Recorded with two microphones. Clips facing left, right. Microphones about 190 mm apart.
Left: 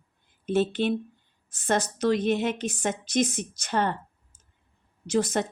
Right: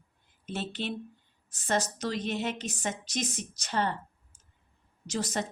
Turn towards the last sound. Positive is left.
turn(degrees=55)  # may be behind; listen again after turning